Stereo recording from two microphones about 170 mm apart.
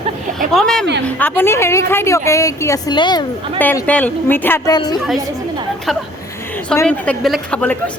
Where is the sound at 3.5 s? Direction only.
10° left (ahead or behind).